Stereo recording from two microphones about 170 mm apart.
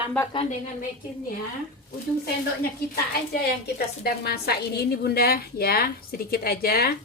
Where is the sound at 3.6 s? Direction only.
70° left (ahead or behind).